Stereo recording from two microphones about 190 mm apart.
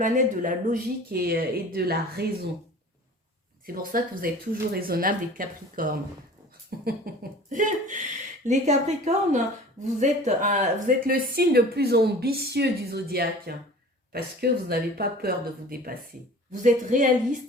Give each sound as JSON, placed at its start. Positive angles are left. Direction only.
{"t": 0.0, "sound": "speech", "side_deg": -40}
{"t": 3.9, "sound": "speech", "side_deg": -50}
{"t": 7.5, "sound": "speech", "side_deg": -40}